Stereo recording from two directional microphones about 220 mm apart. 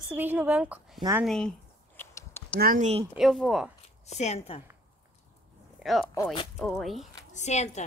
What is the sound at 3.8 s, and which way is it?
Speech, 30° left (ahead or behind).